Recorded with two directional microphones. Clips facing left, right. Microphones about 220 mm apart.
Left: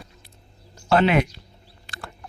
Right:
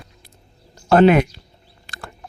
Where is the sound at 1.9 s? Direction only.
45° right (ahead or behind).